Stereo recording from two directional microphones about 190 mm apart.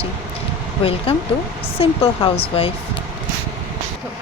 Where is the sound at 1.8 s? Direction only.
30° left (ahead or behind).